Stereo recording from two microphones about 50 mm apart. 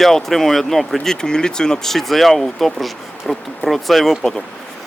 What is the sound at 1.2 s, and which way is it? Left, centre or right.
Speech, centre.